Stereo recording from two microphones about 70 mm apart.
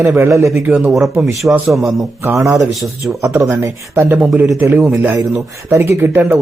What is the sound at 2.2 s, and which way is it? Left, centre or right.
Speech, right.